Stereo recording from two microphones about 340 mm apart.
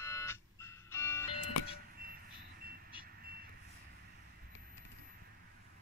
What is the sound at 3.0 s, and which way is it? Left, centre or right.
Reversing beeps, right.